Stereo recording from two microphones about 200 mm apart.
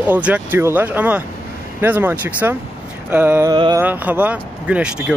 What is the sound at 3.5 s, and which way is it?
Speech, 25° right (ahead or behind).